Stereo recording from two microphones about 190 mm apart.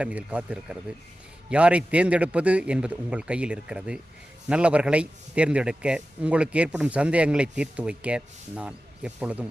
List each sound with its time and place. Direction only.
0.0 s a man's voice: 5° right (ahead or behind)